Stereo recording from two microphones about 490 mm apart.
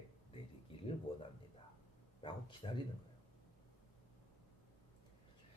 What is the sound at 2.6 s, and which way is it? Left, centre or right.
Speech, centre.